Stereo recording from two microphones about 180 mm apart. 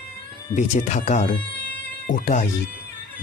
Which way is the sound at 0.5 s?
40° left (ahead or behind).